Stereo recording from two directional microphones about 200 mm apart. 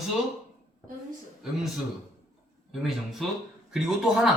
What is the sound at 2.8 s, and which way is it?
Speech, centre (ahead or behind).